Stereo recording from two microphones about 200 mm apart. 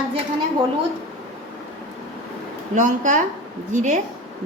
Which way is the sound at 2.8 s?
40° right (ahead or behind).